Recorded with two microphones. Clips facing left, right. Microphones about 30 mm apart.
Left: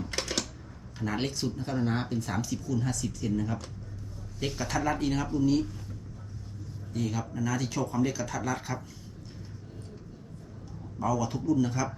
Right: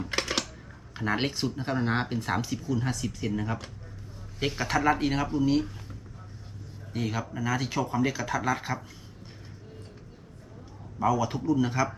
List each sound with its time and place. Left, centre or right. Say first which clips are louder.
0.0 s typing: right 3 dB; right
0.9 s speech: right 3 dB; right
6.9 s speech: right 1 dB; right
11.0 s speech: right 3 dB; right